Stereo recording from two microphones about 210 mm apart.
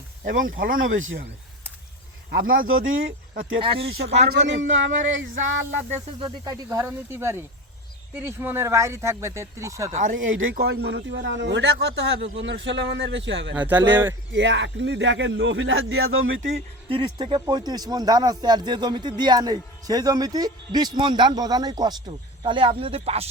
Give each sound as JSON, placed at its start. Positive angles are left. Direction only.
{"t": 0.3, "sound": "speech", "side_deg": -40}
{"t": 0.8, "sound": "speech", "side_deg": -70}
{"t": 2.3, "sound": "speech", "side_deg": -45}
{"t": 2.6, "sound": "speech", "side_deg": -70}
{"t": 3.6, "sound": "speech", "side_deg": -25}
{"t": 3.9, "sound": "speech", "side_deg": -50}
{"t": 5.9, "sound": "speech", "side_deg": -25}
{"t": 9.9, "sound": "speech", "side_deg": -35}
{"t": 10.2, "sound": "speech", "side_deg": -70}
{"t": 10.5, "sound": "a man's voice", "side_deg": -50}
{"t": 13.5, "sound": "speech", "side_deg": -10}
{"t": 14.3, "sound": "a man's voice", "side_deg": -60}
{"t": 16.9, "sound": "speech", "side_deg": -25}